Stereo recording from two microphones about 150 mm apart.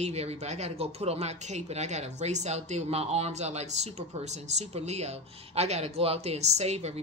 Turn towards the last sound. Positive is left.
turn(degrees=-45)  # may be behind; listen again after turning